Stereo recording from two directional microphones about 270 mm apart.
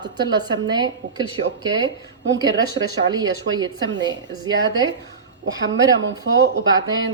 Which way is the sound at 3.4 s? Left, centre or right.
Centre.